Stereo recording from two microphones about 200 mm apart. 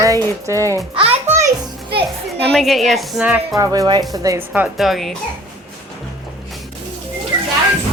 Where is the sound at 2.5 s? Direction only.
Centre (ahead or behind).